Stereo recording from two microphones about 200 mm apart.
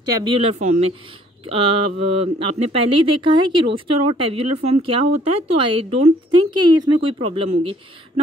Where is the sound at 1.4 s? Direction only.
30° right (ahead or behind).